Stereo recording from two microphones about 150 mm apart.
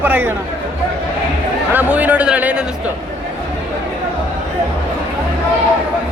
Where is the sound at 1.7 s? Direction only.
10° right (ahead or behind).